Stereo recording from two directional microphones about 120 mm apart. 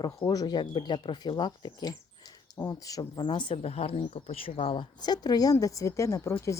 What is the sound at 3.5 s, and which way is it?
A woman's voice, 60° left (ahead or behind).